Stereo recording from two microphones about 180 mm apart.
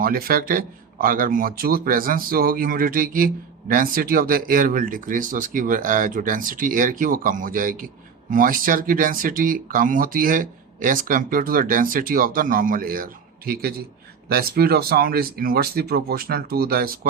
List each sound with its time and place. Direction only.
0.0 s speech: 55° right (ahead or behind)